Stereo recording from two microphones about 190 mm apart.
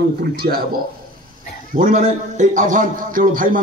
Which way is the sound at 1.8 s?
45° right (ahead or behind).